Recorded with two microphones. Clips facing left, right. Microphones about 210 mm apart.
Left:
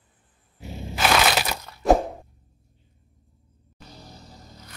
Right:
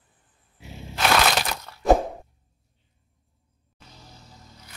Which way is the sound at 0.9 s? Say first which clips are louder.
Even; 5° left (ahead or behind).